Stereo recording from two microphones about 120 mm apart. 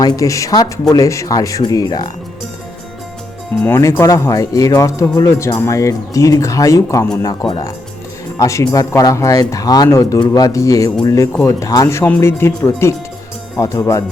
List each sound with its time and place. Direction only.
0.0 s speech: 30° left (ahead or behind)
3.8 s speech: 25° left (ahead or behind)